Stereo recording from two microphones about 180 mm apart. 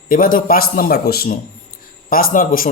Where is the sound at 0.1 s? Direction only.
50° left (ahead or behind).